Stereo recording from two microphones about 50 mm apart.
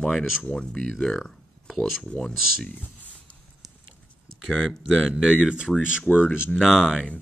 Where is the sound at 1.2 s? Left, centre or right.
Centre.